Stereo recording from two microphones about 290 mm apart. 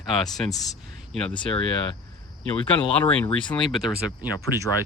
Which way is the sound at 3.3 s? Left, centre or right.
Centre.